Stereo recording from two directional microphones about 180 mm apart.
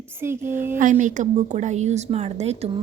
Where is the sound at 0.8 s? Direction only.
45° right (ahead or behind).